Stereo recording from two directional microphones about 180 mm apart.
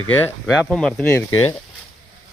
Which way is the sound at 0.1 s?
10° left (ahead or behind).